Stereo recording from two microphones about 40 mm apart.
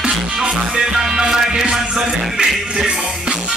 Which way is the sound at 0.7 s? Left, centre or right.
Centre.